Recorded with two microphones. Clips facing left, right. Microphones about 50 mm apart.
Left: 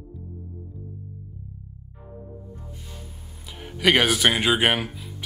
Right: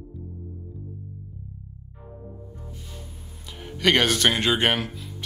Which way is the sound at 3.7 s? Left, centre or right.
Centre.